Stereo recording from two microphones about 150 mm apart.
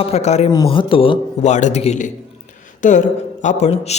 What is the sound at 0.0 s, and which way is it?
Speech, 45° left (ahead or behind).